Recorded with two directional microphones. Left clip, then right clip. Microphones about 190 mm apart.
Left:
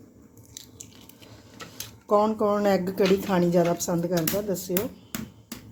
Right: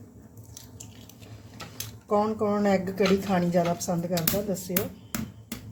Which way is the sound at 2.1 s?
40° left (ahead or behind).